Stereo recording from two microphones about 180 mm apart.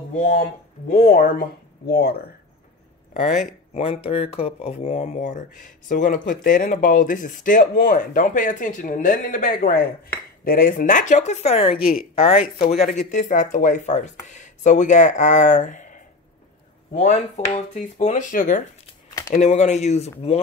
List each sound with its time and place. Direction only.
0.1 s speech: 35° left (ahead or behind); by 2.1 s 60° left (ahead or behind)
3.1 s speech: 45° left (ahead or behind)
3.7 s speech: 30° left (ahead or behind)
12.7 s speech: 45° left (ahead or behind)